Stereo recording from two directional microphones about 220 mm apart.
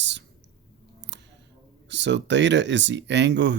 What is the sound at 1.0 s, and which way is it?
Scissors, 55° right (ahead or behind).